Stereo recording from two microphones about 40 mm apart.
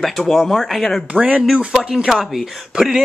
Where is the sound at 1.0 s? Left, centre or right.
Right.